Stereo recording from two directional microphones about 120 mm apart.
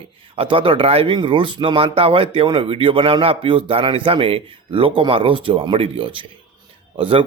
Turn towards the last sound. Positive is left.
turn(degrees=-50)  # may be behind; listen again after turning